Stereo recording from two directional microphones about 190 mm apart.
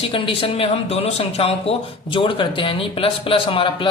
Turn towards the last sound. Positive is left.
turn(degrees=25)  # may be behind; listen again after turning